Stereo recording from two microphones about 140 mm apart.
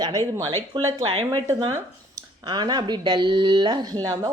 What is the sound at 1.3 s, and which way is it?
Speech, 25° right (ahead or behind).